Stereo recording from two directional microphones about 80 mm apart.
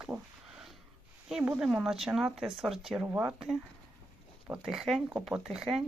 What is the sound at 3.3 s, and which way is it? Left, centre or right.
Speech, centre.